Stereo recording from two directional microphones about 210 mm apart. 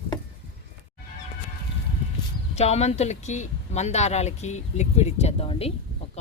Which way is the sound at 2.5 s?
30° left (ahead or behind).